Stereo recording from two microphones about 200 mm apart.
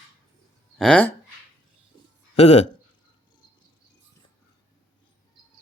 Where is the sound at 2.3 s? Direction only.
35° left (ahead or behind).